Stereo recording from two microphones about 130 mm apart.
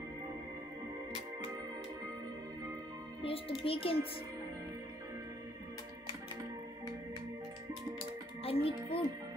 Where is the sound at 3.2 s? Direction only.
45° left (ahead or behind).